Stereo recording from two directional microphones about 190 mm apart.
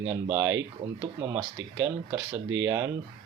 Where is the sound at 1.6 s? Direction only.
80° right.